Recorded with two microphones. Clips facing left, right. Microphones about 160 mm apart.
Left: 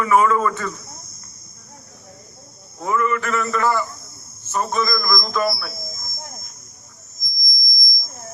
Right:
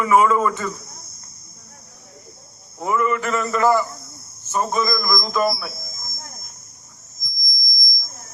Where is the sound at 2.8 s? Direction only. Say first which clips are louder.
Even; 15° right (ahead or behind).